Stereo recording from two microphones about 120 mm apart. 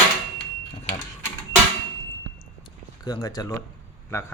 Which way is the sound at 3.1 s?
30° left (ahead or behind).